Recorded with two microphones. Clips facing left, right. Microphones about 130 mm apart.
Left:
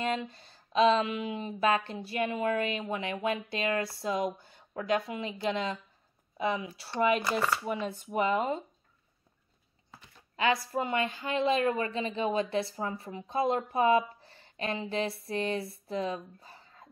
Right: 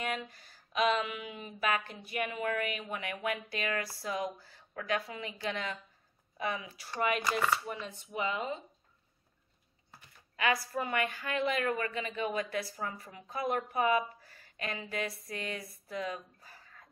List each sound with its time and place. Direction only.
0.0 s speech: 25° left (ahead or behind)
7.8 s speech: 45° left (ahead or behind)
9.9 s speech: 25° left (ahead or behind)